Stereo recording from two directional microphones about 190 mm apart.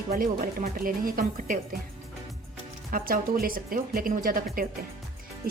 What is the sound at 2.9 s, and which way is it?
A woman's voice, 50° right (ahead or behind).